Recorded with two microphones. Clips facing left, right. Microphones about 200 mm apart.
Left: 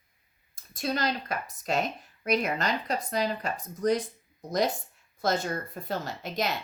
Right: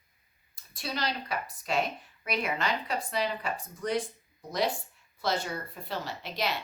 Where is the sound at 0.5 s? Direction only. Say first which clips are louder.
Left 6 dB; 45° left (ahead or behind).